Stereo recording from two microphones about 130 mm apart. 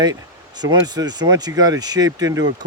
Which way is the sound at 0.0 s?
30° right (ahead or behind).